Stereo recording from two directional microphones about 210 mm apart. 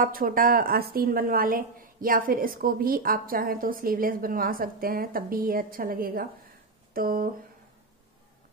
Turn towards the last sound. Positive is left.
turn(degrees=-45)  # may be behind; listen again after turning